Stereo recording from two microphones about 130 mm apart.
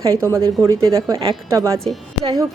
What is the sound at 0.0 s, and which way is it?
A woman's voice, 25° right (ahead or behind).